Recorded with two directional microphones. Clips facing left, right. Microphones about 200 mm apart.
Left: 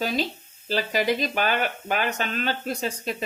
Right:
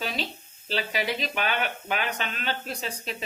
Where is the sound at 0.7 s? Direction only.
45° left (ahead or behind).